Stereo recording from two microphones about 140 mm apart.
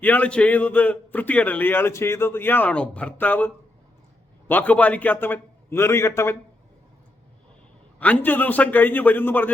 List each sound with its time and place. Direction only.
0.0 s a man's voice: 10° left (ahead or behind)
7.9 s a man's voice: 10° left (ahead or behind)